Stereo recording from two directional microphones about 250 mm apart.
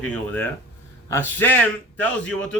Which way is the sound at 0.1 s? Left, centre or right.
Centre.